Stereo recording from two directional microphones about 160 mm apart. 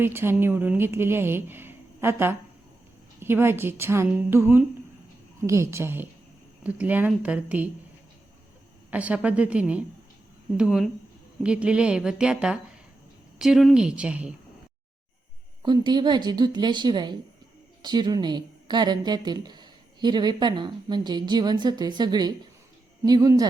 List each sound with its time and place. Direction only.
0.0 s a woman's voice: 15° right (ahead or behind)
8.9 s a woman's voice: 10° right (ahead or behind)
15.6 s a woman's voice: 25° right (ahead or behind)